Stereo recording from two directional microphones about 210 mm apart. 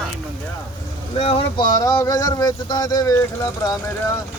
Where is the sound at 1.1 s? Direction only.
25° left (ahead or behind).